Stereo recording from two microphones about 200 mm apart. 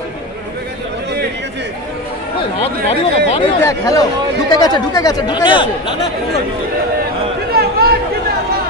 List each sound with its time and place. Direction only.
2.6 s speech: 30° left (ahead or behind)
3.6 s speech: 15° left (ahead or behind)
7.5 s a sound: 50° right (ahead or behind)